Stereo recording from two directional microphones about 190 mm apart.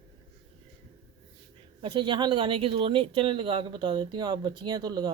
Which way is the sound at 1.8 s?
25° right (ahead or behind).